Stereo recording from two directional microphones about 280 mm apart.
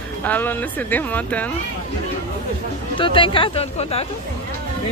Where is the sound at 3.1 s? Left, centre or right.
Centre.